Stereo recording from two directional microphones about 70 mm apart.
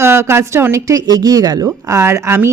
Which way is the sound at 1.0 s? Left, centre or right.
Right.